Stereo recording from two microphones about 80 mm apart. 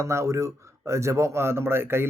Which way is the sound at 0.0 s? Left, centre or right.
Right.